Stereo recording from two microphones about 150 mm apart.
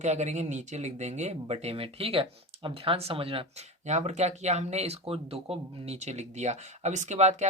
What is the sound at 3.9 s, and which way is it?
Speech, 50° right (ahead or behind).